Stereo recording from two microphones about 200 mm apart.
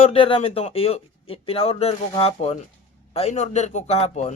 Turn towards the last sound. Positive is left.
turn(degrees=30)  # may be behind; listen again after turning